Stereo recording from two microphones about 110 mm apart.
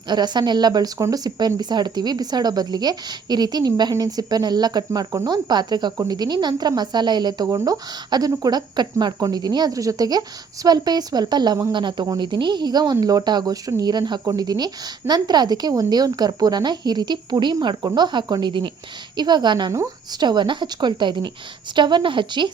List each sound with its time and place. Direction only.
0.1 s speech: 40° right (ahead or behind)